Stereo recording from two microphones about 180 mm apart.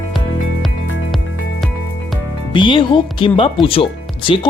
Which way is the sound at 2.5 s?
25° left (ahead or behind).